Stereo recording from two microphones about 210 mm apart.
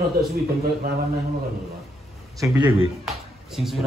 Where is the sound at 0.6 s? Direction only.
45° right (ahead or behind).